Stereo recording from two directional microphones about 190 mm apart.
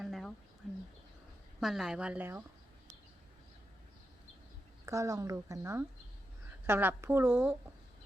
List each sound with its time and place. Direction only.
0.0 s a sound: centre (ahead or behind)
1.6 s a woman's voice: centre (ahead or behind)
4.9 s speech: 15° right (ahead or behind)